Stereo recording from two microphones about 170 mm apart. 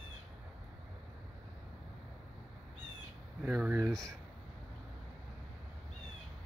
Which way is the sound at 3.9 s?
5° left (ahead or behind).